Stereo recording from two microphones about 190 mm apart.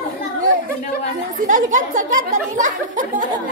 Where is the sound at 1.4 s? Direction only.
45° right (ahead or behind).